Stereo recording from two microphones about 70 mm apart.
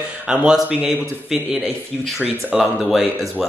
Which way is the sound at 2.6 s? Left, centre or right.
Centre.